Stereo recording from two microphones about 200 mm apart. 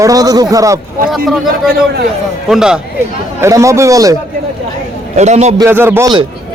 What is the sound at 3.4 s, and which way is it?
Speech, 15° right (ahead or behind).